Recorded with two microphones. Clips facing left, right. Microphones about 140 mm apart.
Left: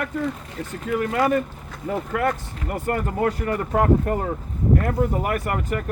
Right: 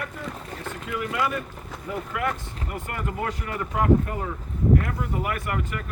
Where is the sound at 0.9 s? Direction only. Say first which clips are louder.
Left 7 dB; 45° left (ahead or behind).